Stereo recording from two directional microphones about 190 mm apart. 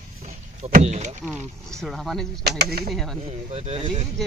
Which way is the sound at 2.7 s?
55° right (ahead or behind).